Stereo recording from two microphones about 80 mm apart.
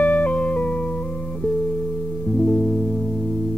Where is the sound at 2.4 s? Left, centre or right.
Centre.